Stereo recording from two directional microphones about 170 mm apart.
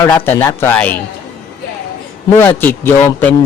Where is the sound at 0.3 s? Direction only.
15° left (ahead or behind).